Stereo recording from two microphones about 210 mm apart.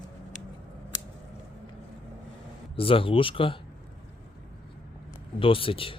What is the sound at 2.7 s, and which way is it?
Speech, 25° left (ahead or behind).